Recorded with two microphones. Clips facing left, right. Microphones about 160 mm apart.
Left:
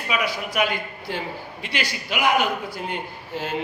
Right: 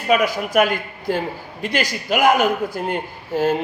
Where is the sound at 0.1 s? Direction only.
45° right (ahead or behind).